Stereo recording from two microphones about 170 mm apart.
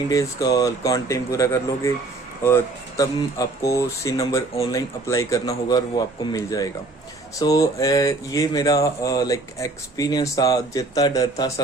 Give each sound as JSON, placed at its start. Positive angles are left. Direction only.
{"t": 0.1, "sound": "speech", "side_deg": 20}